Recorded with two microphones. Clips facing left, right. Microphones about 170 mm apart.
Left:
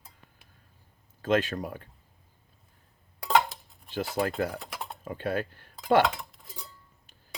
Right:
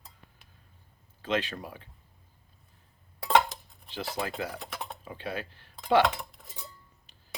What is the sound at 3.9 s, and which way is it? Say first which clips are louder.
Speech: left 5 dB; 50° left (ahead or behind).